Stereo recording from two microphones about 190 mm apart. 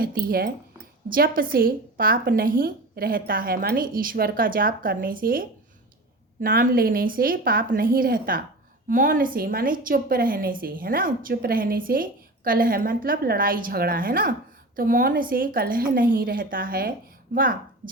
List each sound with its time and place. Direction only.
0.0 s a woman's voice: 50° right (ahead or behind)